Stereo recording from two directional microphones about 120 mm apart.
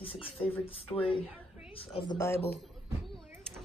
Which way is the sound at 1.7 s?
50° left (ahead or behind).